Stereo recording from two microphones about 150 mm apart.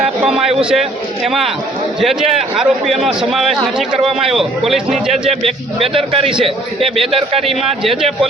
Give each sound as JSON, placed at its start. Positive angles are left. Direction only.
{"t": 0.0, "sound": "a sound", "side_deg": -5}
{"t": 0.6, "sound": "a man's voice", "side_deg": -5}
{"t": 2.0, "sound": "a man's voice", "side_deg": 0}
{"t": 5.8, "sound": "a man's voice", "side_deg": -40}
{"t": 7.4, "sound": "a man's voice", "side_deg": 0}